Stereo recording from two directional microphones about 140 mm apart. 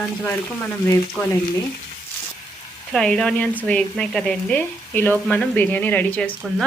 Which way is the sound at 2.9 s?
5° left (ahead or behind).